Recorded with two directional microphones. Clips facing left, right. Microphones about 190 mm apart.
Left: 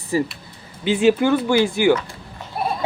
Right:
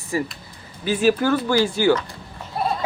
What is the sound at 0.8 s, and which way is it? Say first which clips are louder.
Speech: left 2 dB; 20° left (ahead or behind).